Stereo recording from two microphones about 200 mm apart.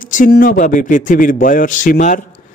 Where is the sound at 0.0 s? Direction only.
40° left (ahead or behind).